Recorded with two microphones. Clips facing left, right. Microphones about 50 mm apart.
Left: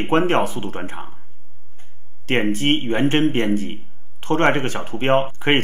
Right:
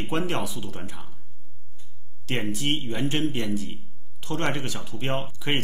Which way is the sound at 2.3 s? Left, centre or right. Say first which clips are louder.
Left 9 dB; left.